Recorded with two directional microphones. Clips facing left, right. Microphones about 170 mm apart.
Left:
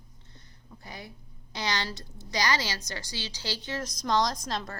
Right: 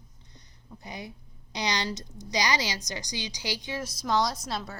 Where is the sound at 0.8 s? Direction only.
20° right (ahead or behind).